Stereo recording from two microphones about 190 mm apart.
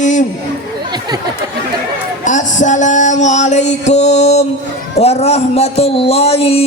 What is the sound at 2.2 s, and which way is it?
Music, 40° left (ahead or behind).